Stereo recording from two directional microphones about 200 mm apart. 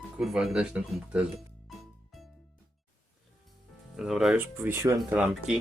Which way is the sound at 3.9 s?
Centre (ahead or behind).